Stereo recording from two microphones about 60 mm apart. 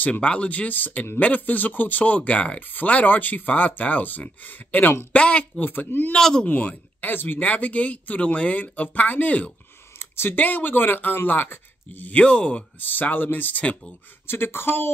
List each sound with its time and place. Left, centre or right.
0.0 s speech: left
5.1 s speech: left
5.6 s speech: left
6.1 s speech: centre
6.4 s speech: left
9.9 s speech: left; by 12.6 s centre
12.8 s speech: left
14.2 s speech: left